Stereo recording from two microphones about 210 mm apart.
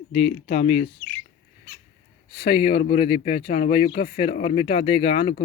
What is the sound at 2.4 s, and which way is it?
Speech, 25° left (ahead or behind).